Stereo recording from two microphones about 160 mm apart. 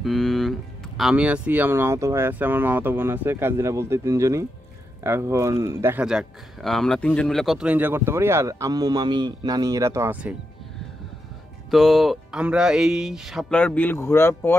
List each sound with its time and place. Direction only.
0.0 s a man's voice: centre (ahead or behind)
11.7 s speech: centre (ahead or behind)